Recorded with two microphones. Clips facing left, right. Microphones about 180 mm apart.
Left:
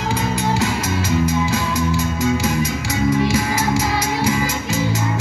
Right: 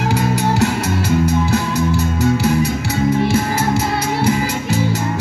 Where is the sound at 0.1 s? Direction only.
65° right (ahead or behind).